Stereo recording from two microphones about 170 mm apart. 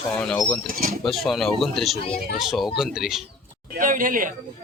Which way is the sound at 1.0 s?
Centre (ahead or behind).